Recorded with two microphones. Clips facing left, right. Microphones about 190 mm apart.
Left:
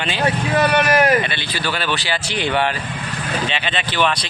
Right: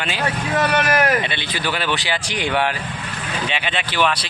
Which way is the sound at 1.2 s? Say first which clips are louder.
Left 1 dB; 20° right (ahead or behind).